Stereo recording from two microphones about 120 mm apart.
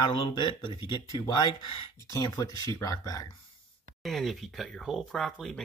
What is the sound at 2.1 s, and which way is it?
Speech, 30° left (ahead or behind).